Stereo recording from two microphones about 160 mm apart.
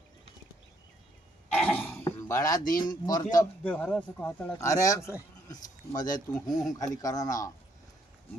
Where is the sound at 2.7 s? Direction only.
25° left (ahead or behind).